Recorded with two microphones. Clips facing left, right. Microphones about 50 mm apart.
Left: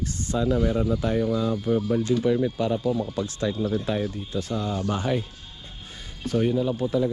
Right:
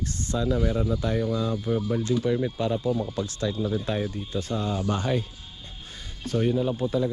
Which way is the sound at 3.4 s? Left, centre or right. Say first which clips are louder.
Left 2 dB; left.